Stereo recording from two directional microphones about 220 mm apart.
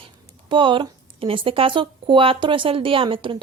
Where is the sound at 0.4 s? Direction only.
20° right (ahead or behind).